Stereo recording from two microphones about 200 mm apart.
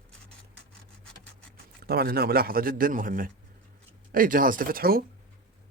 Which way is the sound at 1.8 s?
50° right (ahead or behind).